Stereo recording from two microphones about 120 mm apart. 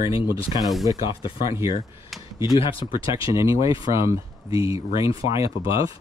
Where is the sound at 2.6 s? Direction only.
50° left (ahead or behind).